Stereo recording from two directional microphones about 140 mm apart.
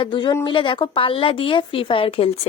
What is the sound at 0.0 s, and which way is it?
A woman's voice, 35° left (ahead or behind).